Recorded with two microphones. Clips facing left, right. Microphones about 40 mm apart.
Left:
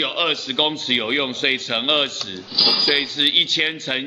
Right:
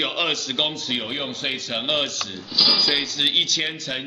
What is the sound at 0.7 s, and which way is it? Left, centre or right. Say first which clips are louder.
Speech: left 6 dB; left.